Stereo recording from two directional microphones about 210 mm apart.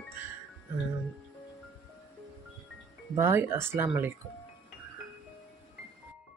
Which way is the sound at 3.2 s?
10° right (ahead or behind).